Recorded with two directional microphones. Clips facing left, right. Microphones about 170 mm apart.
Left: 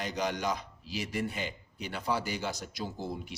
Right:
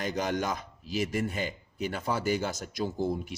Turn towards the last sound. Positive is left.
turn(degrees=-50)  # may be behind; listen again after turning